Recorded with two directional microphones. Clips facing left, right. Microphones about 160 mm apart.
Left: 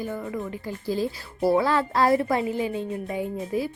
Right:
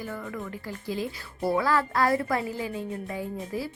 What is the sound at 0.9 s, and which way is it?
Speech, 35° left (ahead or behind).